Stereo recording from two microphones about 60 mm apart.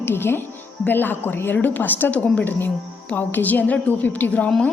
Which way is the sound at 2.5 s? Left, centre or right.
Left.